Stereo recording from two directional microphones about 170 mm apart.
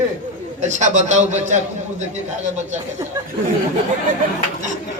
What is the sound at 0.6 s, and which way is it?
A man's voice, 45° right (ahead or behind).